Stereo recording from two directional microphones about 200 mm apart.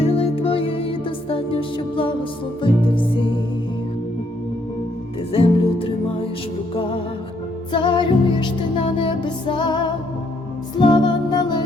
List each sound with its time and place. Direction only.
0.0 s music: 30° left (ahead or behind)
5.3 s music: 30° left (ahead or behind)
7.7 s music: 25° left (ahead or behind)